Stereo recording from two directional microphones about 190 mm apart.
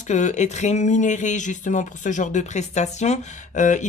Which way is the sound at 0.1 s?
40° left (ahead or behind).